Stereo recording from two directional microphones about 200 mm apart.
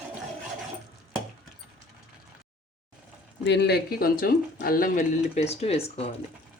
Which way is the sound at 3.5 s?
55° left (ahead or behind).